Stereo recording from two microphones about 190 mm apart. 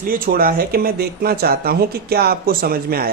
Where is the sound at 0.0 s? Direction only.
50° right (ahead or behind).